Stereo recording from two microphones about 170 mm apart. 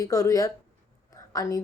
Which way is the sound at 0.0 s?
20° left (ahead or behind).